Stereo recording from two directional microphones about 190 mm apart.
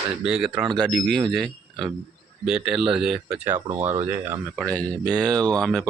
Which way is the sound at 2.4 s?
5° right (ahead or behind).